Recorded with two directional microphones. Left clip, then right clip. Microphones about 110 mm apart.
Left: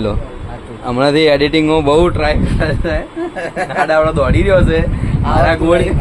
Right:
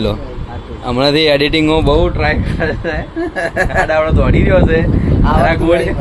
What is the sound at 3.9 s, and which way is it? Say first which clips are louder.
Speech: left 1 dB; 20° left (ahead or behind).